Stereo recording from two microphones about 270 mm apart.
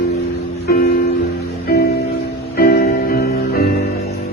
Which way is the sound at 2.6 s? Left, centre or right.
Left.